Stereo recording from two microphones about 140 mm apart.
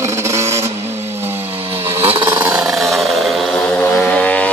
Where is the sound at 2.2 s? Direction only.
15° right (ahead or behind).